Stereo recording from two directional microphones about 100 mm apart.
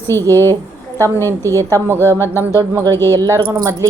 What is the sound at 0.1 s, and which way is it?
A woman's voice, 25° left (ahead or behind).